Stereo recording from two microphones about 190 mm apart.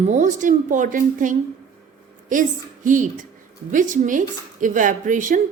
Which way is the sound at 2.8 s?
45° right (ahead or behind).